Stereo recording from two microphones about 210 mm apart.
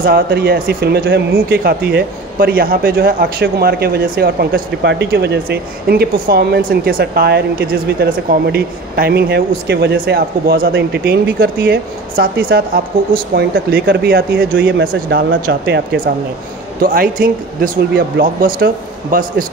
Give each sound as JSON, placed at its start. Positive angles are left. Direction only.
{"t": 0.0, "sound": "speech", "side_deg": -45}
{"t": 16.8, "sound": "speech", "side_deg": -45}